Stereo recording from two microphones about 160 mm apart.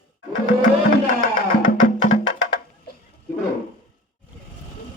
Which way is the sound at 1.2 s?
55° left (ahead or behind).